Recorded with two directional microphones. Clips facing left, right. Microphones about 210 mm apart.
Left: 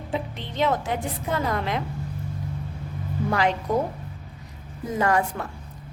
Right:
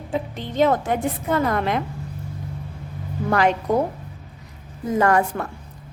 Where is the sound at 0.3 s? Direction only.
45° right (ahead or behind).